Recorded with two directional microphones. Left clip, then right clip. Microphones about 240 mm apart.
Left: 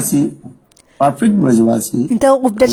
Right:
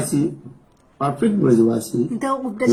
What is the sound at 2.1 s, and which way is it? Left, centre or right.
Speech, left.